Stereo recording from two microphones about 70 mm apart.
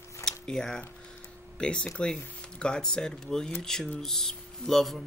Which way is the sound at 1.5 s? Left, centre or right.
Centre.